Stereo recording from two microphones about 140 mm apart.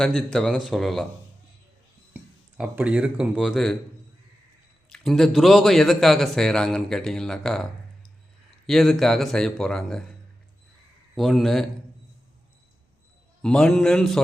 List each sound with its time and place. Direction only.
0.0 s a man's voice: 5° left (ahead or behind)
2.6 s speech: 10° right (ahead or behind)
4.9 s a man's voice: 5° left (ahead or behind)
13.4 s a man's voice: 5° left (ahead or behind)